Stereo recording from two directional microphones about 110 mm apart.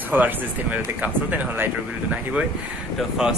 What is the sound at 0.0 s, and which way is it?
Speech, 15° right (ahead or behind).